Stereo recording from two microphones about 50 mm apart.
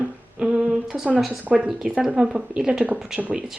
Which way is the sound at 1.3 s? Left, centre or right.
Right.